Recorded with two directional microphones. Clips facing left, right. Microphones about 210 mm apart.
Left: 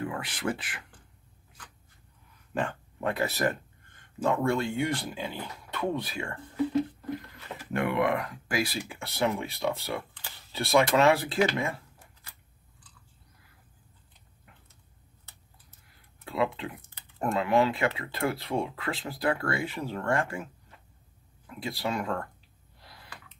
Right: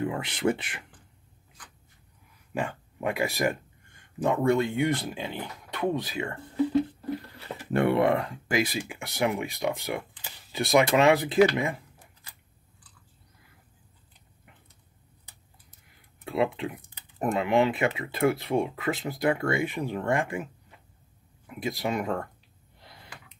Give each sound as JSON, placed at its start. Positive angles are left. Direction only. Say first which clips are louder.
{"t": 0.0, "sound": "speech", "louder": "right 5 dB", "side_deg": -25}
{"t": 2.5, "sound": "speech", "louder": "even", "side_deg": -10}
{"t": 7.2, "sound": "speech", "louder": "right 3 dB", "side_deg": -35}
{"t": 15.2, "sound": "speech", "louder": "left 1 dB", "side_deg": -15}
{"t": 22.8, "sound": "gasp", "louder": "right 1 dB", "side_deg": -20}